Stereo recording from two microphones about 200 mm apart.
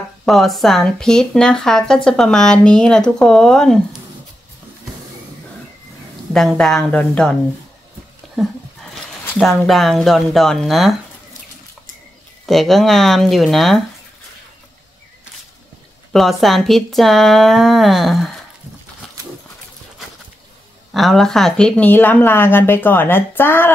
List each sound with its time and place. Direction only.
0.2 s speech: centre (ahead or behind)
6.3 s speech: centre (ahead or behind)
9.2 s speech: 5° left (ahead or behind)
12.4 s speech: centre (ahead or behind)
16.1 s speech: centre (ahead or behind)
20.9 s speech: centre (ahead or behind)